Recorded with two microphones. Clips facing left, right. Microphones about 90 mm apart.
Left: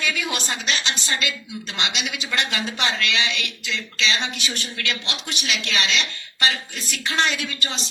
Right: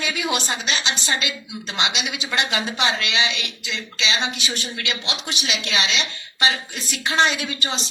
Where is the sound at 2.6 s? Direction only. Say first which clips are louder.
Right 1 dB; 15° right (ahead or behind).